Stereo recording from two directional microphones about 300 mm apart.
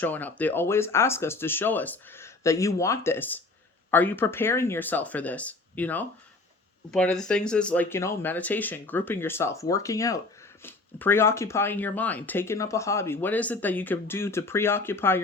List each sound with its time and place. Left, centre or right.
0.0 s speech: centre